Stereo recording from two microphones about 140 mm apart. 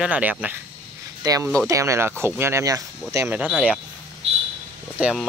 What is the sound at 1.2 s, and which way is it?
Speech, 25° right (ahead or behind).